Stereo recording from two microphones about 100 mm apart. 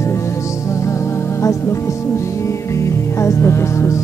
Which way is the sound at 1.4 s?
30° left (ahead or behind).